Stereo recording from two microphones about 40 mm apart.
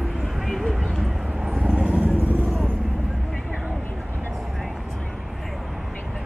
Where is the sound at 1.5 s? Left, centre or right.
Right.